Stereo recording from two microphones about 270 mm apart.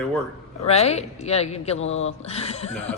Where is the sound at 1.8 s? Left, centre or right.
Left.